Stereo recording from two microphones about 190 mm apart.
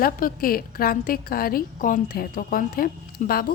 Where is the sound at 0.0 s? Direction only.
50° left (ahead or behind).